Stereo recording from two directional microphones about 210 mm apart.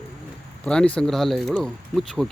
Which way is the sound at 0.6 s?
5° left (ahead or behind).